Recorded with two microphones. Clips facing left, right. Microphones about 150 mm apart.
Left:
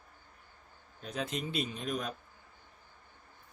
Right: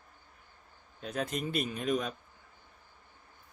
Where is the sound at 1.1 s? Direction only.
50° right (ahead or behind).